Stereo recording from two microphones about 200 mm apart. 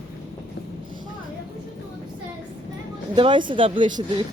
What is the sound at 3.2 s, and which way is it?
Speech, 25° right (ahead or behind).